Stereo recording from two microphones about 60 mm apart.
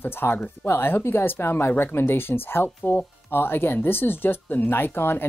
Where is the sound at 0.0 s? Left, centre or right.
Left.